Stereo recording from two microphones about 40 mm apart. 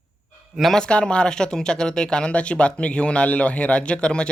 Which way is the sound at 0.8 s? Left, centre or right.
Left.